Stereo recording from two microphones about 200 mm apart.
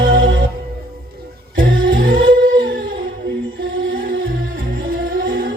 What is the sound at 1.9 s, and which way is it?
Music, 75° right (ahead or behind).